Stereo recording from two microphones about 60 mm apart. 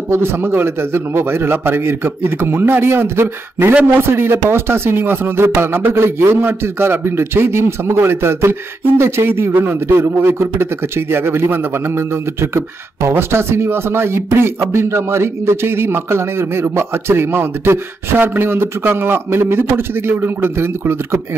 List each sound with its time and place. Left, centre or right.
0.1 s a man's voice: right